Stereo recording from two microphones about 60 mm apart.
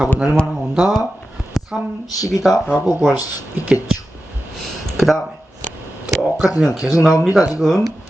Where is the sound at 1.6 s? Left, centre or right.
Centre.